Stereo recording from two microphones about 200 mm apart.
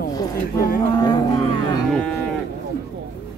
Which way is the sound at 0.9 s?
20° left (ahead or behind).